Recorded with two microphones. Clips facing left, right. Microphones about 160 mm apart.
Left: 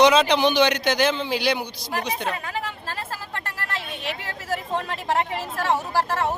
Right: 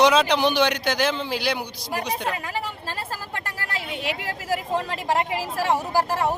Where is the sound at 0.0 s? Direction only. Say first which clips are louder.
Left 1 dB; 5° right (ahead or behind).